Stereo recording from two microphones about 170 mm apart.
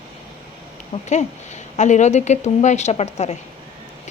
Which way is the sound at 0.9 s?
35° left (ahead or behind).